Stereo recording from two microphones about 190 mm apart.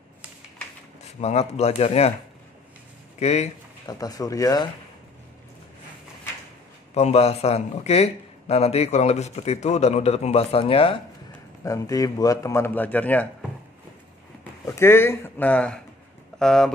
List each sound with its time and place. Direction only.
1.2 s a man's voice: 35° left (ahead or behind)
3.2 s speech: 35° left (ahead or behind)
3.8 s speech: 20° left (ahead or behind)
6.9 s a man's voice: 35° left (ahead or behind)
11.6 s a man's voice: 20° left (ahead or behind)
14.8 s a man's voice: 15° left (ahead or behind)